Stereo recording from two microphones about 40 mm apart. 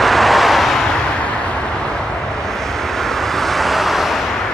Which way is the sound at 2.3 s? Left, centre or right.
Centre.